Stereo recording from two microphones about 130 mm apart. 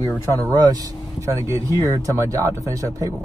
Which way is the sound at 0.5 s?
30° right (ahead or behind).